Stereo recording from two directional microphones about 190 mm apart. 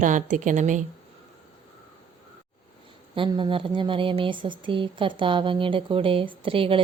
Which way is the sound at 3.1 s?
25° right (ahead or behind).